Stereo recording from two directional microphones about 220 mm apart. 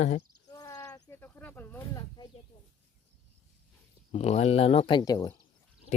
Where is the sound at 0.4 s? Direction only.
15° left (ahead or behind).